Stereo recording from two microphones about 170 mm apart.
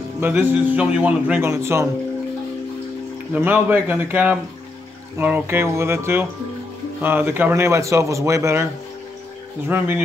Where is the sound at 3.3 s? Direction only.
10° right (ahead or behind).